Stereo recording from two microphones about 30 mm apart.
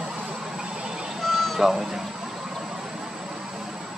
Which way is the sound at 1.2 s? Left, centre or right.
Centre.